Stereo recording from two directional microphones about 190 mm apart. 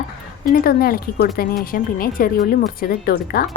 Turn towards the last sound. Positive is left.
turn(degrees=50)  # may be behind; listen again after turning